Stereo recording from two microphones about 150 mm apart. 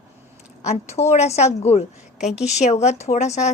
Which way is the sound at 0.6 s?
45° left (ahead or behind).